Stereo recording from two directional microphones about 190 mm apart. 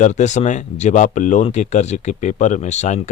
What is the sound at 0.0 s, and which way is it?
Speech, 40° left (ahead or behind).